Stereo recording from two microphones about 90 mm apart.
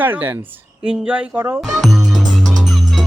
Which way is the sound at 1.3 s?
25° right (ahead or behind).